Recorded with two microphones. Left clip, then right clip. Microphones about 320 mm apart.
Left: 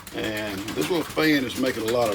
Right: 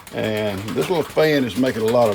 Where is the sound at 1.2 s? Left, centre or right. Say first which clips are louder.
Right 5 dB; centre.